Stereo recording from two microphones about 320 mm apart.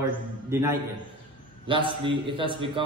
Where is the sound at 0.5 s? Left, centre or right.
Centre.